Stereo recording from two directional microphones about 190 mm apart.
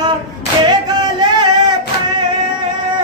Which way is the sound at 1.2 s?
20° right (ahead or behind).